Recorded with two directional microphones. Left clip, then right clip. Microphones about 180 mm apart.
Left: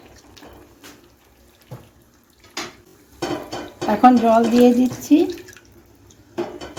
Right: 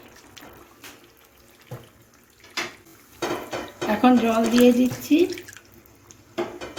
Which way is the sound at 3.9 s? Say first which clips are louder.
Left 6 dB; 40° left (ahead or behind).